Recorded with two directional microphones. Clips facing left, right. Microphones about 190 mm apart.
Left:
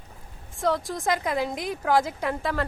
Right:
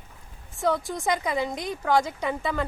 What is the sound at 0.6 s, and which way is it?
Speech, centre (ahead or behind).